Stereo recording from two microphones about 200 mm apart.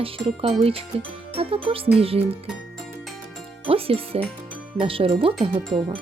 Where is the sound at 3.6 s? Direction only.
30° right (ahead or behind).